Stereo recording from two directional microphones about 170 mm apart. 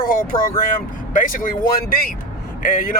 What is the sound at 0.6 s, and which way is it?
Speech, 50° left (ahead or behind).